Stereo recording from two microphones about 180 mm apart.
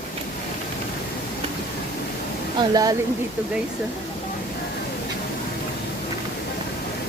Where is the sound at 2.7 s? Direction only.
20° right (ahead or behind).